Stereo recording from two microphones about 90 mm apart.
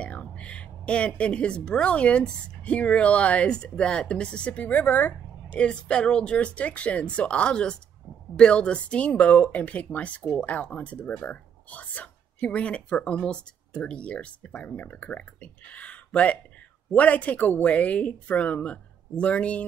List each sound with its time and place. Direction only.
0.0 s a woman's voice: 15° left (ahead or behind)